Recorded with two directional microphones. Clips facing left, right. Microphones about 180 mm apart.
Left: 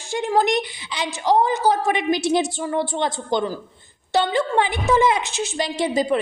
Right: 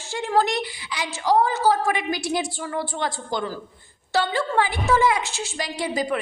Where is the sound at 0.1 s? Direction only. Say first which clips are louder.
Left 3 dB; 15° left (ahead or behind).